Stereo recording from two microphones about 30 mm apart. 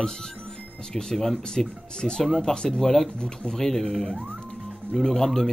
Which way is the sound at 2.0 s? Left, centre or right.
Left.